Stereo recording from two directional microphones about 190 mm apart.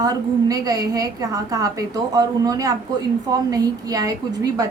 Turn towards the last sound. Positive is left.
turn(degrees=-20)  # may be behind; listen again after turning